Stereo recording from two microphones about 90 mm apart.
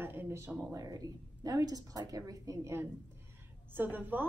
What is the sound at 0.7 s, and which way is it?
A woman's voice, 40° right (ahead or behind).